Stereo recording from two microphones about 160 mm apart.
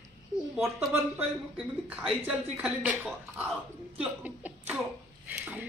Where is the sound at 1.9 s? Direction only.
10° right (ahead or behind).